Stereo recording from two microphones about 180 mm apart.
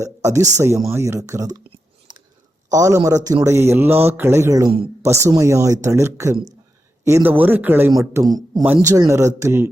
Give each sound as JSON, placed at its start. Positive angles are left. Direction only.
{"t": 0.0, "sound": "a man's voice", "side_deg": -15}